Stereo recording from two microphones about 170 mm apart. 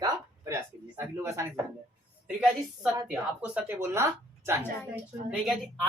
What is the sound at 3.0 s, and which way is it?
Speech, 5° right (ahead or behind).